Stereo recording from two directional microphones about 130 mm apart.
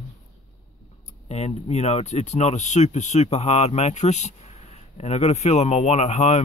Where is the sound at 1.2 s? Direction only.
55° left (ahead or behind).